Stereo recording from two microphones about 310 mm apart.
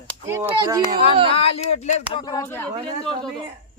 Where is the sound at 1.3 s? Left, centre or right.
Centre.